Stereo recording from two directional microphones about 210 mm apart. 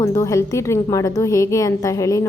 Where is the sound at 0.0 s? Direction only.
15° left (ahead or behind).